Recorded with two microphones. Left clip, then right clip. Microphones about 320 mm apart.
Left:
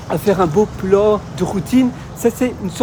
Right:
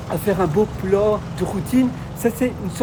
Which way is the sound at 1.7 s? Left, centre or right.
Centre.